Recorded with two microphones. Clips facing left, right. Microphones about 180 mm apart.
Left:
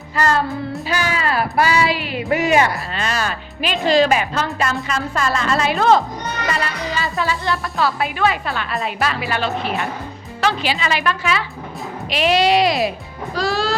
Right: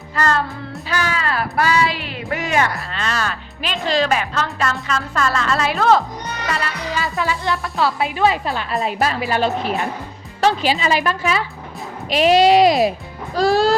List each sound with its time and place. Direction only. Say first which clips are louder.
0.2 s child singing: left 2 dB; 10° left (ahead or behind)
6.5 s music: even; centre (ahead or behind)
8.0 s a woman's voice: right 2 dB; 30° right (ahead or behind); by 13.7 s 50° right (ahead or behind)